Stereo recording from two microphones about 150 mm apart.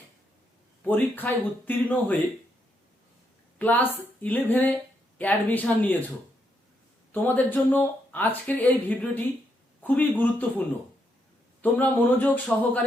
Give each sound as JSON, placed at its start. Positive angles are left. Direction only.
{"t": 0.9, "sound": "speech", "side_deg": 10}
{"t": 3.6, "sound": "speech", "side_deg": 10}
{"t": 7.1, "sound": "speech", "side_deg": 10}
{"t": 11.6, "sound": "speech", "side_deg": 10}